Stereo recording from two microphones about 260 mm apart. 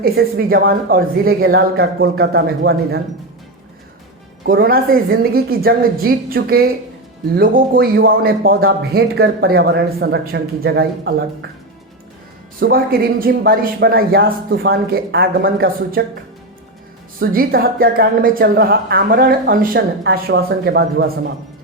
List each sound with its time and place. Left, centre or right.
0.0 s a man's voice: right
4.4 s a man's voice: right
12.5 s a man's voice: right
17.2 s a man's voice: right